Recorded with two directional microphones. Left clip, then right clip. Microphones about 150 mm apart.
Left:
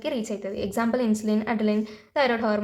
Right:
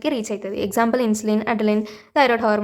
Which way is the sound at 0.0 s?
35° right (ahead or behind).